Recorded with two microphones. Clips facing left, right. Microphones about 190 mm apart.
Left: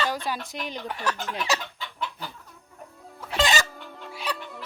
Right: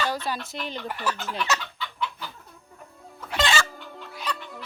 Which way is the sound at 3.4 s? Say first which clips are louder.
Left 1 dB; 15° left (ahead or behind).